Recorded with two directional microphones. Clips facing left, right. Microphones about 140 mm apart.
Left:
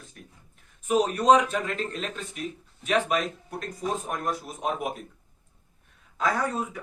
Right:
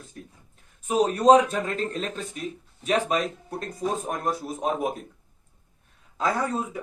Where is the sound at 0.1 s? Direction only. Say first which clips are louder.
Right 8 dB; 25° right (ahead or behind).